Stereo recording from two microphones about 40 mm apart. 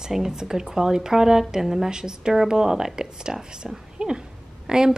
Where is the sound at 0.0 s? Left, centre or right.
Centre.